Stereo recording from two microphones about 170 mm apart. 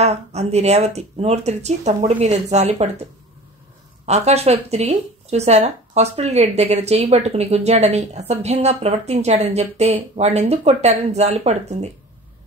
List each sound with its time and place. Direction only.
0.0 s speech: 40° right (ahead or behind)
4.0 s speech: 40° right (ahead or behind)